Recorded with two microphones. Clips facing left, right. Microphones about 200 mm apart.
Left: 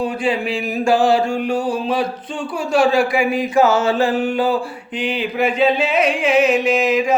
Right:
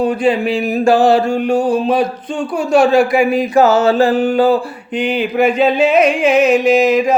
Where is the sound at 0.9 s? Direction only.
40° right (ahead or behind).